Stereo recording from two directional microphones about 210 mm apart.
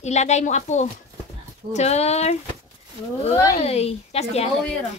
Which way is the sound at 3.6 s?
30° left (ahead or behind).